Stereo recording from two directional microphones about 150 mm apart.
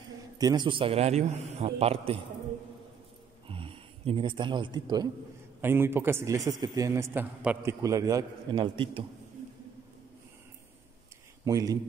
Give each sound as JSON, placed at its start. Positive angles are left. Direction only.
{"t": 0.4, "sound": "a man's voice", "side_deg": -25}
{"t": 3.4, "sound": "a sound", "side_deg": -35}
{"t": 5.6, "sound": "a man's voice", "side_deg": -15}
{"t": 8.5, "sound": "a man's voice", "side_deg": -35}
{"t": 11.4, "sound": "a man's voice", "side_deg": -25}